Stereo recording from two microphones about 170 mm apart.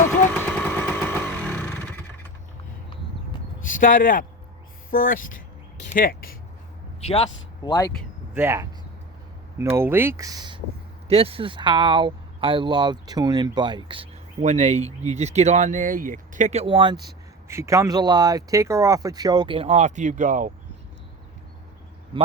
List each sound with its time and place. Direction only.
0.3 s a sound: 10° left (ahead or behind)
3.7 s speech: 50° left (ahead or behind)
7.0 s a man's voice: 35° left (ahead or behind)
7.7 s speech: 15° left (ahead or behind)
8.3 s speech: 15° right (ahead or behind); by 14.1 s 30° right (ahead or behind)
14.4 s speech: 40° right (ahead or behind)
22.1 s a man's voice: 30° right (ahead or behind)